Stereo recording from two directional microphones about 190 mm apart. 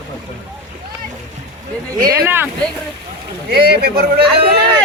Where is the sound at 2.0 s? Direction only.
10° right (ahead or behind).